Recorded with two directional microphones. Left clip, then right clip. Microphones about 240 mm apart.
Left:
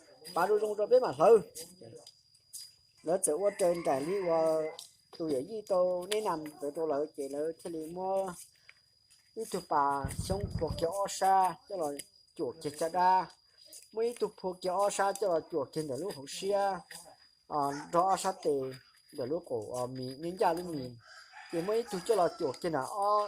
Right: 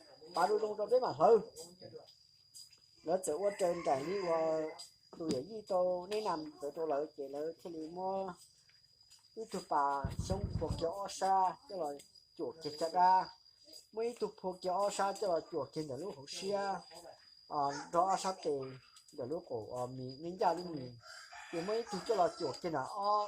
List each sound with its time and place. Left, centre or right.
0.3 s speech: left
3.0 s speech: left
9.5 s speech: left
21.7 s speech: left